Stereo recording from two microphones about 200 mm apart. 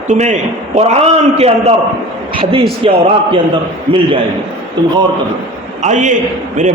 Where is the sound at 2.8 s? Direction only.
30° right (ahead or behind).